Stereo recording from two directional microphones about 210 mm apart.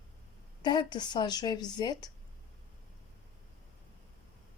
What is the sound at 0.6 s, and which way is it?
Speech, 20° left (ahead or behind).